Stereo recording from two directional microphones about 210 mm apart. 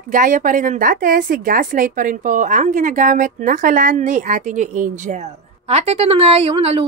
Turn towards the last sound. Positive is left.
turn(degrees=-25)  # may be behind; listen again after turning